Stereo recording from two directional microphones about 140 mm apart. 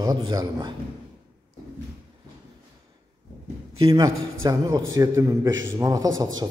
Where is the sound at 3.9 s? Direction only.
25° right (ahead or behind).